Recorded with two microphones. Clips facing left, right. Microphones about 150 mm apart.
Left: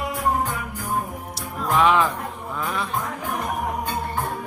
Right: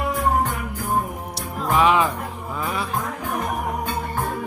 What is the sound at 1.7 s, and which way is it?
Music, 5° right (ahead or behind).